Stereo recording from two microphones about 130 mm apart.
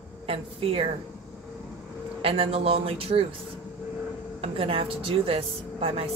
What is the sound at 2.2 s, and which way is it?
Speech, 45° right (ahead or behind).